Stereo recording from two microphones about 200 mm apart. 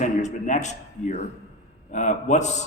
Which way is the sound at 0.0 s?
35° left (ahead or behind).